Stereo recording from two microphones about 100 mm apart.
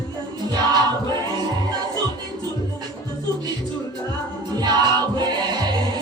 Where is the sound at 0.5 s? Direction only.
45° right (ahead or behind).